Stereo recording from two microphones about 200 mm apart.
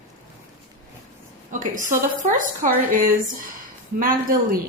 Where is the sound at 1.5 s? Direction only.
40° right (ahead or behind).